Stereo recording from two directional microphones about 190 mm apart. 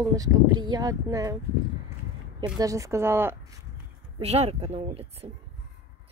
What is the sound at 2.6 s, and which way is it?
Speech, 15° right (ahead or behind).